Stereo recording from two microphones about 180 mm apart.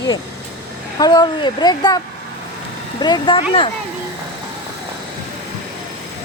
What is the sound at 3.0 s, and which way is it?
Speech, 25° left (ahead or behind).